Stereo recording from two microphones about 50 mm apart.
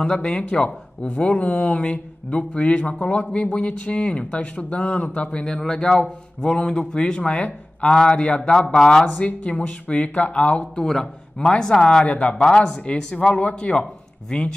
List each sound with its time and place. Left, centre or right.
0.0 s speech: left
5.4 s speech: centre
9.0 s speech: left
10.6 s speech: centre